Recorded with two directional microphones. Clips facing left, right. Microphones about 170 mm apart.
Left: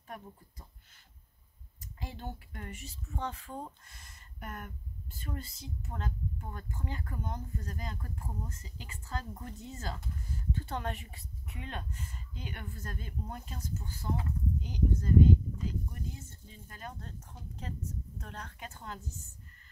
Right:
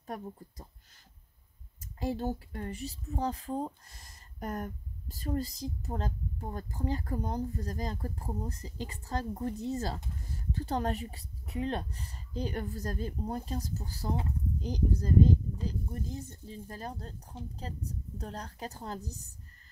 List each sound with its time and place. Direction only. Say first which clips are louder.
0.0 s a woman's voice: right 6 dB; 40° right (ahead or behind)
1.8 s a woman's voice: right 11 dB; 40° right (ahead or behind)